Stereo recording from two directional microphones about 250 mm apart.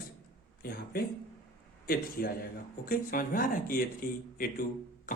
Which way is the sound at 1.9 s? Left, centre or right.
Left.